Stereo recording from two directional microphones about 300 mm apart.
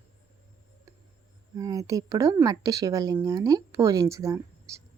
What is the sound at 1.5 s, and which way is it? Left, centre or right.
Speech, centre.